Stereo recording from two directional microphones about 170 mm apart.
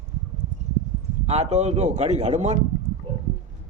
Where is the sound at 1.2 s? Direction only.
40° right (ahead or behind).